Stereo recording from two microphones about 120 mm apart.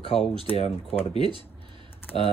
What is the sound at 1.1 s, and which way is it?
Speech, 45° right (ahead or behind).